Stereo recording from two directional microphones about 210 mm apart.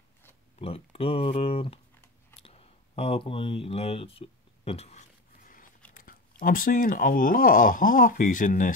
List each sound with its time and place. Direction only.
0.6 s speech: 30° left (ahead or behind)
2.4 s a sound: 30° left (ahead or behind)
6.4 s speech: 40° left (ahead or behind)